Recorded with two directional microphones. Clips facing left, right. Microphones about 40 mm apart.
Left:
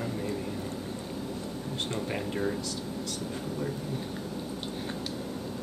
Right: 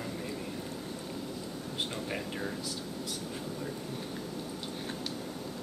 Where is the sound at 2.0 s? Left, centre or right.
Centre.